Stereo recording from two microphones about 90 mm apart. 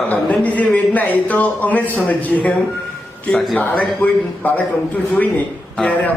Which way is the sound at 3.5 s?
15° left (ahead or behind).